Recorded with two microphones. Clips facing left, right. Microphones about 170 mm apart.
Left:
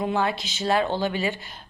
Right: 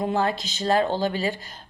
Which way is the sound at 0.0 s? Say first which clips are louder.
Right 1 dB; 40° right (ahead or behind).